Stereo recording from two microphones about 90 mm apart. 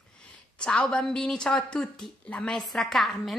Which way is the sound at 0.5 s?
10° left (ahead or behind).